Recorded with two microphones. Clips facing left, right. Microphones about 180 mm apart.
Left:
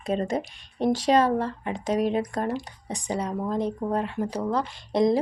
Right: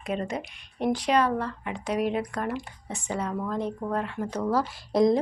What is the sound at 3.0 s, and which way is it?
Speech, 15° left (ahead or behind).